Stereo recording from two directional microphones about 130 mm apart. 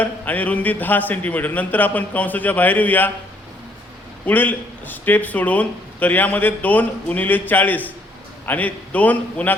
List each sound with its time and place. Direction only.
0.0 s speech: 10° left (ahead or behind)
4.3 s speech: 15° left (ahead or behind)